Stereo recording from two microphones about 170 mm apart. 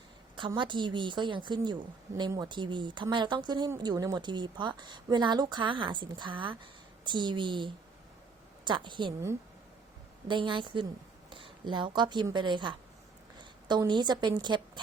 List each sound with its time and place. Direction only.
0.3 s speech: 30° right (ahead or behind)
10.2 s a woman's voice: 30° right (ahead or behind)